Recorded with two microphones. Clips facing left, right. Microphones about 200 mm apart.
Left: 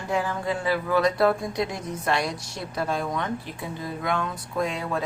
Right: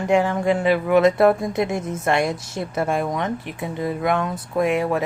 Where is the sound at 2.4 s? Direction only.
20° right (ahead or behind).